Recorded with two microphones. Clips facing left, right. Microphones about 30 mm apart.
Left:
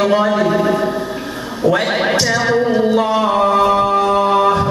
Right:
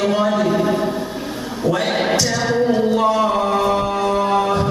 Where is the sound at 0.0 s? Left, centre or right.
Centre.